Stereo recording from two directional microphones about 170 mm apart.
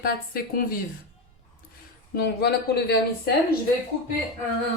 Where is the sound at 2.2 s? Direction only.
75° left (ahead or behind).